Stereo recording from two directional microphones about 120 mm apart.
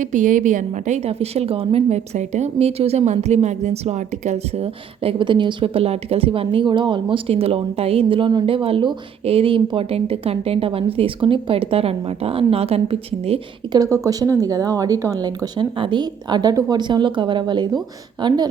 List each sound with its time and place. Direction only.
0.0 s a woman's voice: 90° right; by 2.0 s 55° right (ahead or behind)
2.1 s speech: 70° right (ahead or behind); by 13.4 s 55° right (ahead or behind)
13.7 s speech: 25° right (ahead or behind)